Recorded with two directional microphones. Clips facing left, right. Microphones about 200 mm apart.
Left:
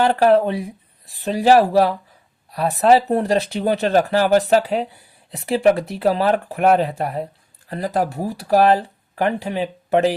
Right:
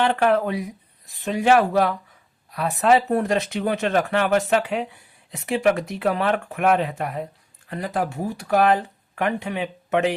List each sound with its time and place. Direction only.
0.0 s speech: 35° left (ahead or behind)